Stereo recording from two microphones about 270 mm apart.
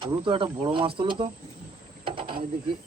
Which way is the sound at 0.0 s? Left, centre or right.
Centre.